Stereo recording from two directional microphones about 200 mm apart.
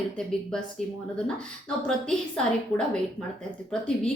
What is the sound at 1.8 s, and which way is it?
Speech, 5° left (ahead or behind).